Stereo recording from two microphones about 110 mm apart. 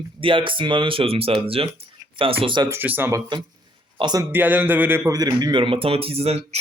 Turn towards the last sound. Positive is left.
turn(degrees=-70)  # may be behind; listen again after turning